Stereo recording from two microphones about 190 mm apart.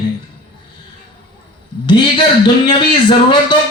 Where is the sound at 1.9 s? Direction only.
25° left (ahead or behind).